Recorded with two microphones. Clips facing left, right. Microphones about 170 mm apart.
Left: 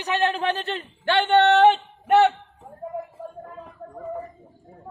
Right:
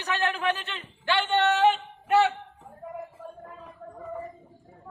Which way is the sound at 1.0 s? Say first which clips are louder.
Left 6 dB; 60° left (ahead or behind).